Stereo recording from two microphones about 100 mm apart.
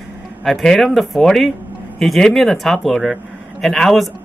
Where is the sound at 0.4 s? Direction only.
5° left (ahead or behind).